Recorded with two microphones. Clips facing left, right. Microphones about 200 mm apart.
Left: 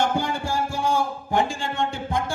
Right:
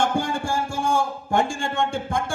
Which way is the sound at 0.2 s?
50° right (ahead or behind).